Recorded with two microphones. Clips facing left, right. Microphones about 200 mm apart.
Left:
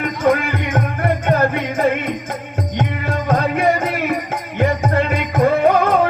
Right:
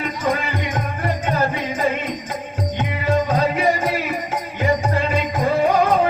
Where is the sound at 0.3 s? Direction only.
55° left (ahead or behind).